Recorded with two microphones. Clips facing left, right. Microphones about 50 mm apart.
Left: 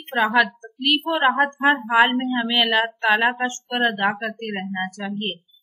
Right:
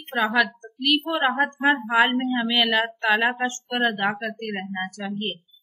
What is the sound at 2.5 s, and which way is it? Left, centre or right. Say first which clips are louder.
Speech: left 3 dB; centre.